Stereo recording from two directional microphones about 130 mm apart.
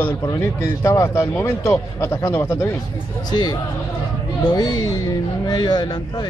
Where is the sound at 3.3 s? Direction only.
35° left (ahead or behind).